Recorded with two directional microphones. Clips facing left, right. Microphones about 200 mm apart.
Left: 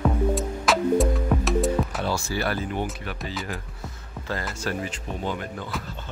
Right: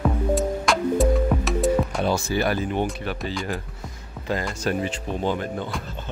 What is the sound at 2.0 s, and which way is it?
Speech, 20° right (ahead or behind).